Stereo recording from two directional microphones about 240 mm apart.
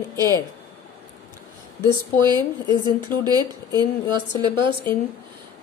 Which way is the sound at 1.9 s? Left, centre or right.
Centre.